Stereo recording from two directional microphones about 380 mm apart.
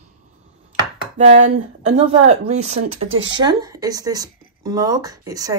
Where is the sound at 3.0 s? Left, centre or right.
Right.